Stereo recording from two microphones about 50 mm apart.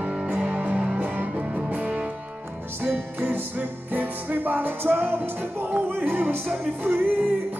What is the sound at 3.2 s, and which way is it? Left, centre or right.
Music, right.